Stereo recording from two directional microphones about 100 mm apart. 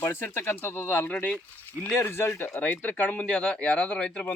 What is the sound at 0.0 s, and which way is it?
Speech, 20° left (ahead or behind).